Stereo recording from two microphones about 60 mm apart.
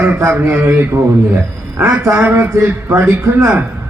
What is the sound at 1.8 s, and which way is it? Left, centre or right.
Speech, right.